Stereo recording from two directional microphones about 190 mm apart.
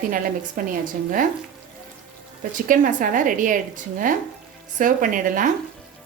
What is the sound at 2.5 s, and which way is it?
A woman's voice, 45° right (ahead or behind).